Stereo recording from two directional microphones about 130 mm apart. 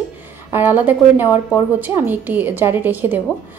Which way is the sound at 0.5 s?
15° right (ahead or behind).